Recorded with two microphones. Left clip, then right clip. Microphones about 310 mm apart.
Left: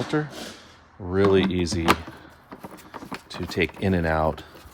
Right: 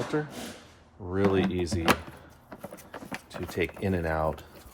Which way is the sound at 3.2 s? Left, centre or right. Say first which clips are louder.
Left 6 dB; left.